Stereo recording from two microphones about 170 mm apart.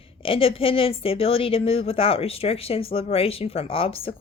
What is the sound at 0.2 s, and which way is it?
A woman's voice, 30° left (ahead or behind).